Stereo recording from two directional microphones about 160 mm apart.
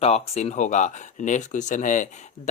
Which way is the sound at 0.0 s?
40° left (ahead or behind).